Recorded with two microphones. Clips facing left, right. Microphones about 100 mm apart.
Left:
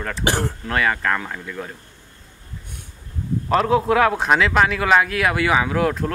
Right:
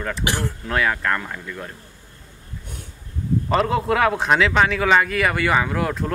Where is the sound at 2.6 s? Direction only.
50° right (ahead or behind).